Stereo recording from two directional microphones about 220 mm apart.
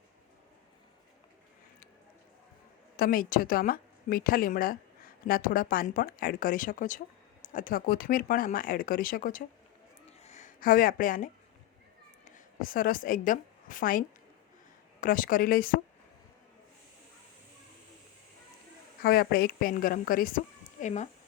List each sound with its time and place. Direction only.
2.9 s speech: 40° left (ahead or behind)
10.1 s a sound: 30° left (ahead or behind)
12.2 s a woman's voice: 35° left (ahead or behind)
15.0 s speech: 40° left (ahead or behind)
19.0 s speech: 45° left (ahead or behind)